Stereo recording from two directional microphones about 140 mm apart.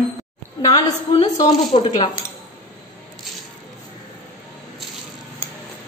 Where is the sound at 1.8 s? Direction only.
35° left (ahead or behind).